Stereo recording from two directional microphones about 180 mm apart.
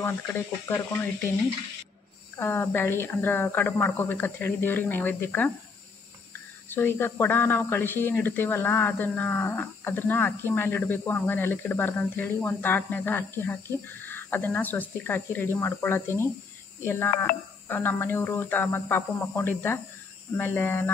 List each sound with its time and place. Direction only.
0.0 s speech: 15° left (ahead or behind)
2.3 s speech: 15° left (ahead or behind)
6.7 s speech: 10° left (ahead or behind)